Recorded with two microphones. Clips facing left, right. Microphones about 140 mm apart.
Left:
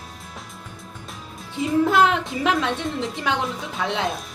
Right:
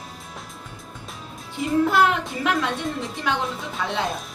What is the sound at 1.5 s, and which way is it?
A woman's voice, 20° left (ahead or behind).